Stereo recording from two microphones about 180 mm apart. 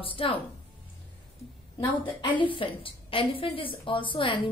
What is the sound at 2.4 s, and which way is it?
A woman's voice, 30° left (ahead or behind).